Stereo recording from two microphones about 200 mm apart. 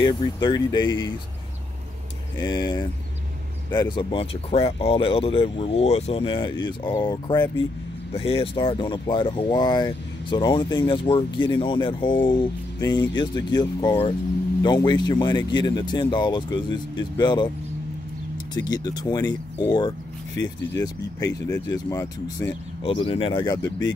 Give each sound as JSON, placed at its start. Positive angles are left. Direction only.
{"t": 0.0, "sound": "speech", "side_deg": 20}
{"t": 2.3, "sound": "speech", "side_deg": 20}
{"t": 18.5, "sound": "speech", "side_deg": 20}
{"t": 22.8, "sound": "speech", "side_deg": 25}